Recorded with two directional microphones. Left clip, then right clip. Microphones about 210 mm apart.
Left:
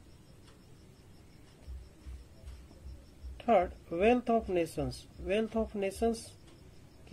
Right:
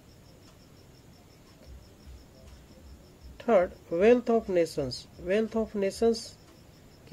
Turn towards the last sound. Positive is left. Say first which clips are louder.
# right 6 dB
turn(degrees=-20)  # may be behind; listen again after turning